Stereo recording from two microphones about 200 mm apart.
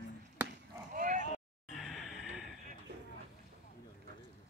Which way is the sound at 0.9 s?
40° right (ahead or behind).